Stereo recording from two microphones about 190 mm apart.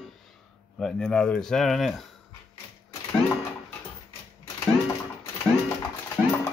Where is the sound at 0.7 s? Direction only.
5° left (ahead or behind).